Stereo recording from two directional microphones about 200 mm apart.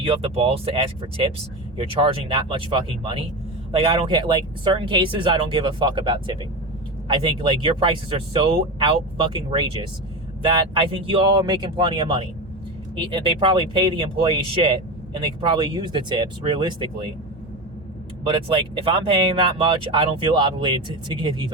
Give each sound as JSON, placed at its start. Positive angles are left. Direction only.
{"t": 0.0, "sound": "speech", "side_deg": -30}
{"t": 18.3, "sound": "speech", "side_deg": -25}